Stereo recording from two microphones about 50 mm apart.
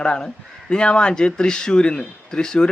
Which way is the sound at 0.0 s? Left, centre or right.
Centre.